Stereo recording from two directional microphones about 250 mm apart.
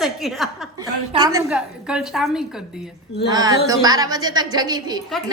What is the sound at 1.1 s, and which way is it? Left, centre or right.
Speech, centre.